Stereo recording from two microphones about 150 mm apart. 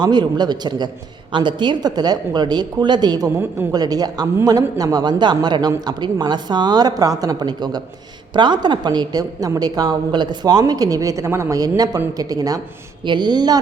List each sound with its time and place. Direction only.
0.0 s a woman's voice: 30° right (ahead or behind)